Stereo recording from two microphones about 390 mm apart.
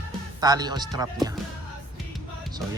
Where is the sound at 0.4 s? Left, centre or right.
Centre.